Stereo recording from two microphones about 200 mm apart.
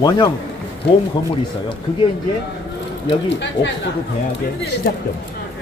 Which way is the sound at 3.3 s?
60° left (ahead or behind).